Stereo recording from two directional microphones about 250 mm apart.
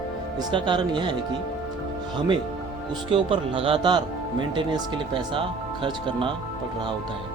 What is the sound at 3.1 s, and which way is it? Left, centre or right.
Speech, right.